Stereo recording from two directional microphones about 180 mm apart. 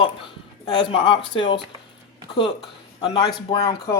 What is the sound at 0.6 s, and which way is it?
Speech, 25° left (ahead or behind).